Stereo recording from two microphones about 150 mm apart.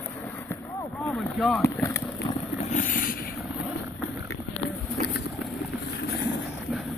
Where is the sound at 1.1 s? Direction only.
Centre (ahead or behind).